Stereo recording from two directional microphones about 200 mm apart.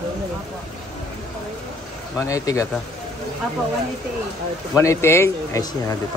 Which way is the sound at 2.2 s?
15° left (ahead or behind).